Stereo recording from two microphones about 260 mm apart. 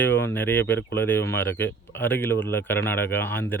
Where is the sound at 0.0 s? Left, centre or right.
Centre.